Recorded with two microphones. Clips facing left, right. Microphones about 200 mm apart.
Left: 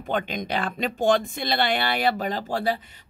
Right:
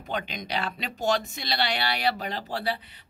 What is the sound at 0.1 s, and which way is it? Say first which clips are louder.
Speech: left 5 dB; 50° left (ahead or behind).